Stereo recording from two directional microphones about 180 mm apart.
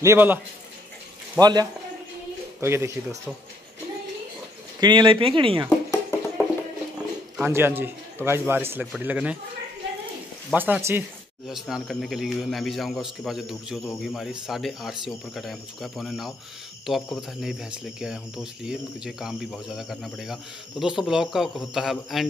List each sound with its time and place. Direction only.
0.0 s a man's voice: 10° right (ahead or behind)
1.4 s a man's voice: 20° right (ahead or behind)
4.7 s speech: 25° right (ahead or behind)
5.7 s music: 10° left (ahead or behind)
7.3 s a man's voice: 15° right (ahead or behind)
10.5 s a man's voice: 10° right (ahead or behind)